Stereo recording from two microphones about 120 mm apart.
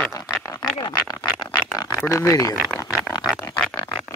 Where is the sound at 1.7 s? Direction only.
30° left (ahead or behind).